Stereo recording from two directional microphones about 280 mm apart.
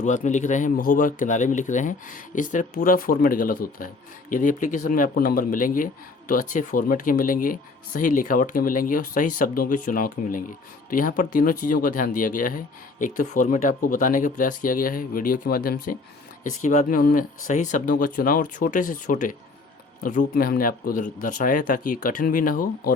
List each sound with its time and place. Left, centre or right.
0.0 s speech: left